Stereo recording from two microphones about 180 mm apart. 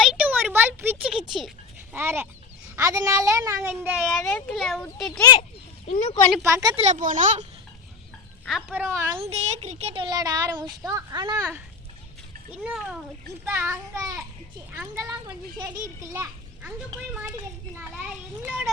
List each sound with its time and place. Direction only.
0.0 s a sound: 5° right (ahead or behind)
1.9 s speech: 15° right (ahead or behind)
4.2 s a child's voice: 10° left (ahead or behind)
5.2 s speech: 25° left (ahead or behind)
5.9 s speech: 35° left (ahead or behind)
6.4 s a child's voice: 20° right (ahead or behind)
6.7 s speech: 40° right (ahead or behind)
8.4 s a child's voice: 5° right (ahead or behind)
9.1 s a child's voice: 35° right (ahead or behind)
11.3 s speech: 10° right (ahead or behind)
12.6 s a child's voice: centre (ahead or behind)
13.4 s speech: 15° right (ahead or behind)
16.1 s children playing: 15° right (ahead or behind)
17.7 s speech: 10° right (ahead or behind)